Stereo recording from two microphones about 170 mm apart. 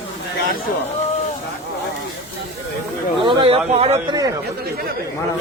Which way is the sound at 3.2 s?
30° right (ahead or behind).